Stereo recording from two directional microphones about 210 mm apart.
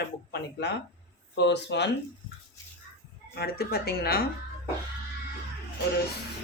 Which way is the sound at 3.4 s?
50° left (ahead or behind).